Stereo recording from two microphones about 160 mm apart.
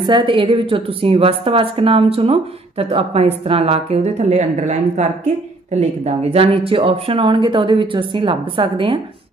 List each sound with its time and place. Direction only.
0.0 s a woman's voice: 30° right (ahead or behind)